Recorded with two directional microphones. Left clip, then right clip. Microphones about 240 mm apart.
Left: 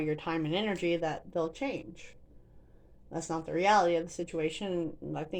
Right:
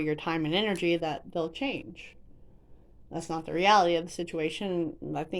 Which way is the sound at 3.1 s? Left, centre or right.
Right.